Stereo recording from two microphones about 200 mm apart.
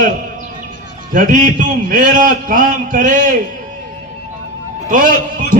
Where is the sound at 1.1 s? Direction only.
40° right (ahead or behind).